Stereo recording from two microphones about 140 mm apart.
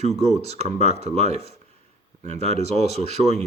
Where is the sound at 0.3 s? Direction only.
50° right (ahead or behind).